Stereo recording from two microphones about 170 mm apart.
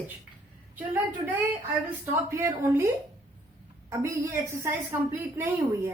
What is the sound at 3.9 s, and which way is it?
A woman's voice, 15° right (ahead or behind).